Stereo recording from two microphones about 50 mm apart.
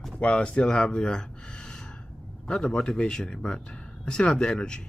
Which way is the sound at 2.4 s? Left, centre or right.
Centre.